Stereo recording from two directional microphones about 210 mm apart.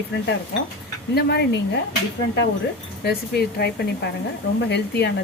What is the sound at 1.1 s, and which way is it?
Speech, 50° left (ahead or behind).